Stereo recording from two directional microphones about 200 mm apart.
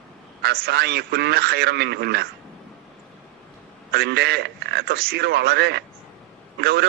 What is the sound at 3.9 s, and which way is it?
A man's voice, 50° right (ahead or behind).